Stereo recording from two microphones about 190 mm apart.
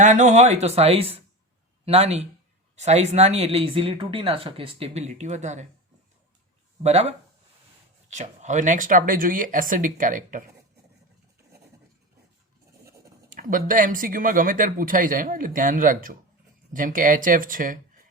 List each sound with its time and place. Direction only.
0.0 s a man's voice: 40° right (ahead or behind)
6.8 s speech: 35° right (ahead or behind)
13.3 s speech: 45° right (ahead or behind)